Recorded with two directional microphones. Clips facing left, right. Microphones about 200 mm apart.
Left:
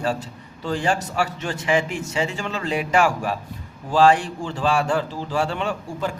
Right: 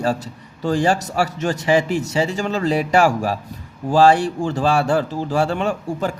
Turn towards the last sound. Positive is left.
turn(degrees=-45)  # may be behind; listen again after turning